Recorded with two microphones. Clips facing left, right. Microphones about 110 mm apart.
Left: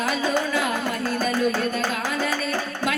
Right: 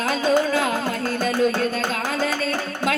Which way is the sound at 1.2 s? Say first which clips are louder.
Right 3 dB; 25° right (ahead or behind).